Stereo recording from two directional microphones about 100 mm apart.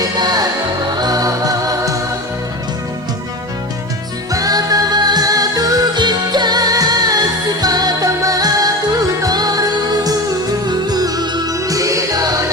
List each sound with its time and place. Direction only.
0.2 s music: 40° right (ahead or behind)
4.3 s music: 35° right (ahead or behind)